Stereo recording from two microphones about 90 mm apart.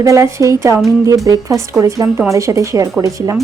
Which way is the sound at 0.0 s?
35° right (ahead or behind).